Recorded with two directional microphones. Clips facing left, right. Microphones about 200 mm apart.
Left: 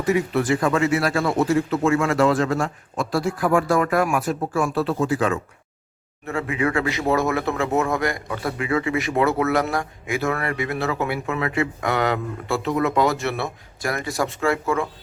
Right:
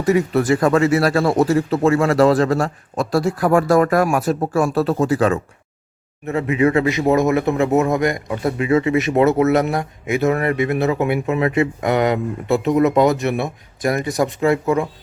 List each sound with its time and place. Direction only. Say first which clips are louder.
0.0 s speech: right 4 dB; 40° right (ahead or behind)
6.2 s speech: right 6 dB; 20° right (ahead or behind)